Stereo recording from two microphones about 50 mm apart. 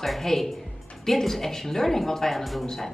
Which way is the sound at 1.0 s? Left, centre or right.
Centre.